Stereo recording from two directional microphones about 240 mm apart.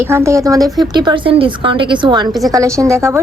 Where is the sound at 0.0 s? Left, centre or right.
Centre.